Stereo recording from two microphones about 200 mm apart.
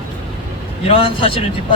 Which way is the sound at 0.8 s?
25° left (ahead or behind).